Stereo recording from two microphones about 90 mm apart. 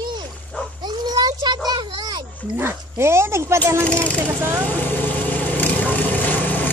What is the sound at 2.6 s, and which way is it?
Speech, 30° right (ahead or behind).